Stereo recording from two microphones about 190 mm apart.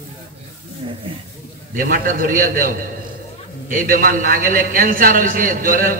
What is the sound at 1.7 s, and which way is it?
A man's voice, 45° right (ahead or behind).